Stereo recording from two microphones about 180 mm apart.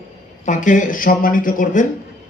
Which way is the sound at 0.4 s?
45° left (ahead or behind).